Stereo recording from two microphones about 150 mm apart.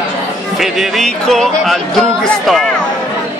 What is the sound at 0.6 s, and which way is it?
Music, centre (ahead or behind).